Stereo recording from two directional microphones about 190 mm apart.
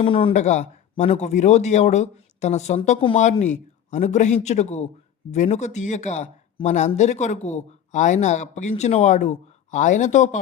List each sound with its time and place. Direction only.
0.0 s speech: 30° left (ahead or behind)